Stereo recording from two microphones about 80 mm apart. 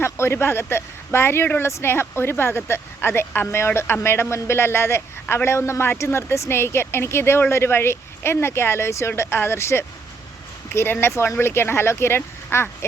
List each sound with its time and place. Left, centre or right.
0.0 s speech: left